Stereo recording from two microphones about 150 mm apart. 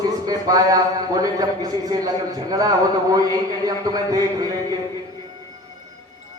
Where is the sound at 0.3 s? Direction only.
25° right (ahead or behind).